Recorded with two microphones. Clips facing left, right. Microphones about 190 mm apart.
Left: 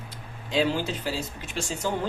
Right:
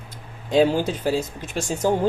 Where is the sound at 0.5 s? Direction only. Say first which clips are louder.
Right 7 dB; 45° right (ahead or behind).